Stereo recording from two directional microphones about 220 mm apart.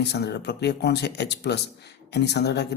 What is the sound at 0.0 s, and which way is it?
Speech, 50° left (ahead or behind).